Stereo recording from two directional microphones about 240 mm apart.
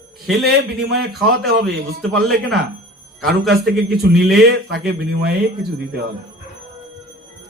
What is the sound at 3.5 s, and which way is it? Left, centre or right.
Speech, right.